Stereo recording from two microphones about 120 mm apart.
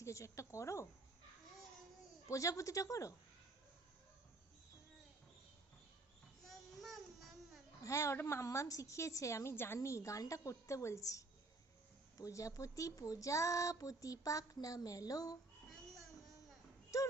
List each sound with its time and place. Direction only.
0.0 s a woman's voice: 25° left (ahead or behind)
2.2 s a woman's voice: 25° left (ahead or behind)
6.5 s a sound: centre (ahead or behind)
7.8 s a woman's voice: 25° left (ahead or behind)
16.9 s music: 25° left (ahead or behind)